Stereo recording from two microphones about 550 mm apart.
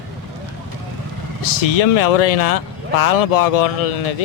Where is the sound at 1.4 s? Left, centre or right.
Left.